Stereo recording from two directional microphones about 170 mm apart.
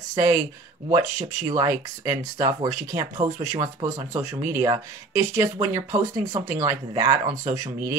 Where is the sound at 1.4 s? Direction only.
20° right (ahead or behind).